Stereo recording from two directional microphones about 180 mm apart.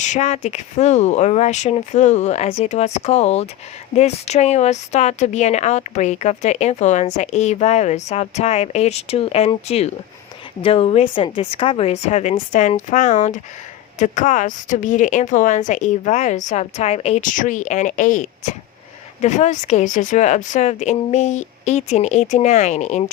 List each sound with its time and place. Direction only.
0.0 s a woman's voice: 40° left (ahead or behind)